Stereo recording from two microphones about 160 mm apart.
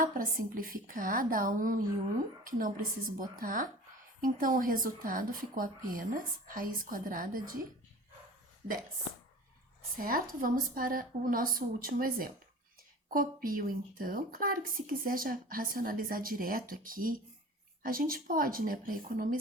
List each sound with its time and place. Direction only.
0.0 s a woman's voice: 60° right (ahead or behind)
10.0 s a woman's voice: 60° right (ahead or behind)